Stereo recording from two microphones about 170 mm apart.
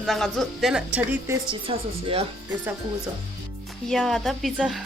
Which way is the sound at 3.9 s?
Centre (ahead or behind).